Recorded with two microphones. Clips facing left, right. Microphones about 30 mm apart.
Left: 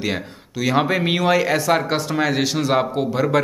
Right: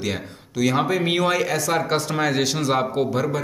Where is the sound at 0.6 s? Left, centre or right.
Centre.